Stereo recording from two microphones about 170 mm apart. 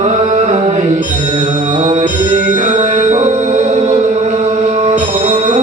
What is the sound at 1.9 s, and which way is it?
Music, 45° right (ahead or behind).